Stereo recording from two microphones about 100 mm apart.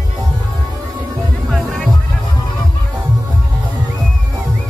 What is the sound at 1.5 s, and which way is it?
Music, 5° left (ahead or behind).